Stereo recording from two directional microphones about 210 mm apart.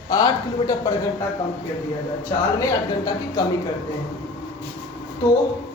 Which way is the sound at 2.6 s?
15° left (ahead or behind).